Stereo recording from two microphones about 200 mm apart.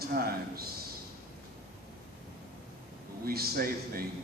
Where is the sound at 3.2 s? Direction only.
50° right (ahead or behind).